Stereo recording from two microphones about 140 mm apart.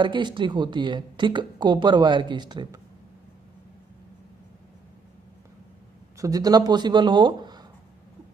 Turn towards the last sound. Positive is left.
turn(degrees=-30)  # may be behind; listen again after turning